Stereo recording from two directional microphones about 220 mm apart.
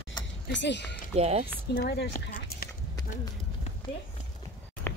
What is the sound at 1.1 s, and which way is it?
Speech, 30° right (ahead or behind).